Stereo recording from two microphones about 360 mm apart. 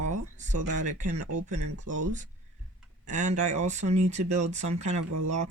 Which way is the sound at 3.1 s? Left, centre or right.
Centre.